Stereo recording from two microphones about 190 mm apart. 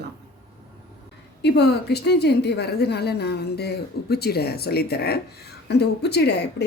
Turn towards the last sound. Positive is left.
turn(degrees=60)  # may be behind; listen again after turning